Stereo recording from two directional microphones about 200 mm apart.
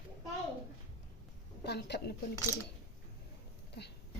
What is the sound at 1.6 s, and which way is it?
Speech, 55° left (ahead or behind).